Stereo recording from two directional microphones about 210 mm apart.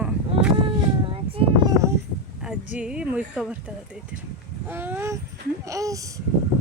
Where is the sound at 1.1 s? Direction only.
25° right (ahead or behind).